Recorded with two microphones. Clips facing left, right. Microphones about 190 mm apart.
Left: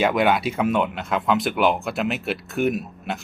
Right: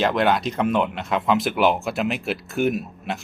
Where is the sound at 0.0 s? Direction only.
5° left (ahead or behind).